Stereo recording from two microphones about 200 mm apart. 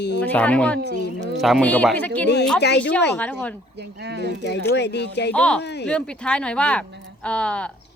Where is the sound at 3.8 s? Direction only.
55° right (ahead or behind).